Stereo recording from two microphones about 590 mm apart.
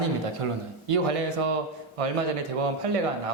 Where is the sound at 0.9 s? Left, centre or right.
Right.